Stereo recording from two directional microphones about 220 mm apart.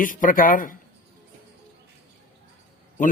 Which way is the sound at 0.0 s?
40° left (ahead or behind).